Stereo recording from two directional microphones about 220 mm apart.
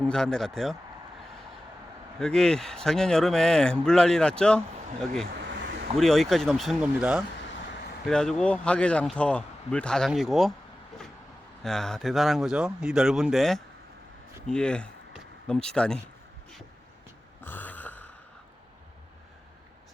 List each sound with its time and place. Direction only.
0.0 s speech: 5° left (ahead or behind)
2.1 s speech: 5° left (ahead or behind)
5.3 s a sound: 50° right (ahead or behind)
6.0 s speech: centre (ahead or behind)
11.6 s speech: centre (ahead or behind)
17.4 s a sound: 10° left (ahead or behind)